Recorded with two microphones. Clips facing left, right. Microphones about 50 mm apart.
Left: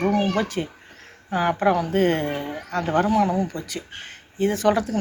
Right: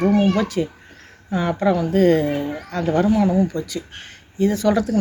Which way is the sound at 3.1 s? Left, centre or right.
Left.